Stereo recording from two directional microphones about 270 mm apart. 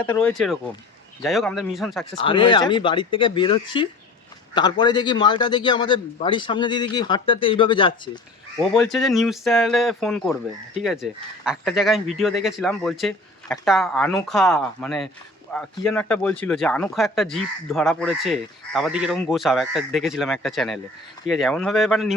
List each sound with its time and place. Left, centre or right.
0.0 s speech: centre
2.0 s a man's voice: centre
8.5 s speech: centre